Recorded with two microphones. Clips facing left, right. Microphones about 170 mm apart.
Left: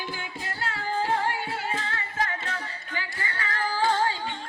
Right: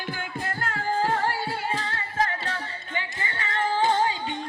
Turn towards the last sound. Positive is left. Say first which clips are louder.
# right 2 dB
turn(degrees=-20)  # may be behind; listen again after turning